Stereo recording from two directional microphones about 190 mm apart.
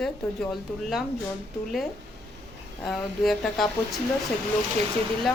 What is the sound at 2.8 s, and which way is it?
Speech, centre (ahead or behind).